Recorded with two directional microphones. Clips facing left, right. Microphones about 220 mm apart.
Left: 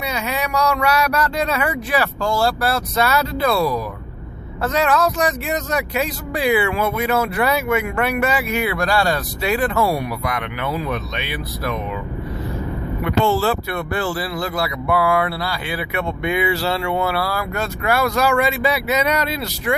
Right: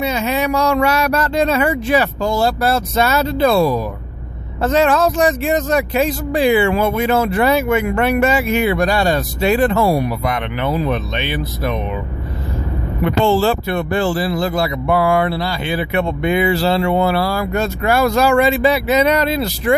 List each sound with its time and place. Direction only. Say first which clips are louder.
0.0 s speech: right 6 dB; 25° right (ahead or behind)
13.1 s speech: right 3 dB; 30° right (ahead or behind)